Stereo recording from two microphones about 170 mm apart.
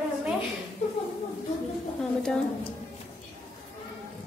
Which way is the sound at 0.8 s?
40° left (ahead or behind).